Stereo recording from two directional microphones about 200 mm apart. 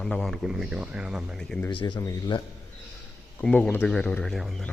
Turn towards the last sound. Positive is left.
turn(degrees=0)  # may be behind; listen again after turning